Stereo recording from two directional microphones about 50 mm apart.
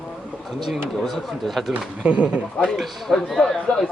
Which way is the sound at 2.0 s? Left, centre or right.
Right.